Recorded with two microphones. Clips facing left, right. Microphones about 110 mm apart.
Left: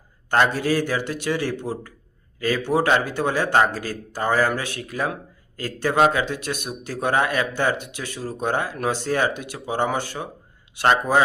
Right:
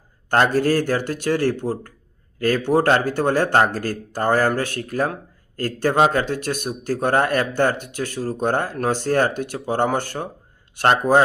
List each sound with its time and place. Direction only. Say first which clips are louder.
0.5 s speech: right 4 dB; 45° right (ahead or behind)